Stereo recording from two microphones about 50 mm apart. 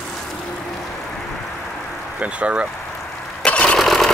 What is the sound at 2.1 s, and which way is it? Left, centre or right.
Speech, right.